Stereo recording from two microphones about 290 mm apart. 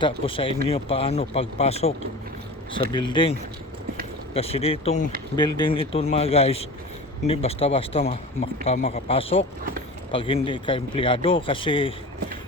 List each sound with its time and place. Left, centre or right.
0.0 s speech: centre
2.9 s speech: centre
4.4 s speech: centre